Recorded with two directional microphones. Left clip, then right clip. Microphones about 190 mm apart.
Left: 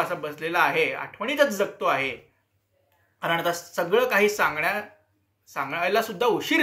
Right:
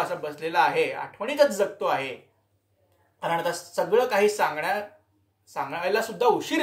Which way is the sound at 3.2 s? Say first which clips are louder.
Left 1 dB; 10° right (ahead or behind).